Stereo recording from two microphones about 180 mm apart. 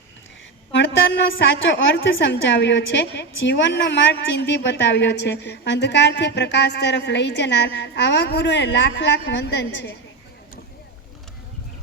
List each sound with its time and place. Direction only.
0.7 s a woman's voice: 90° left